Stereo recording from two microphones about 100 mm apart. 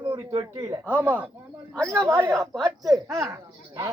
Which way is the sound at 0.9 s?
15° right (ahead or behind).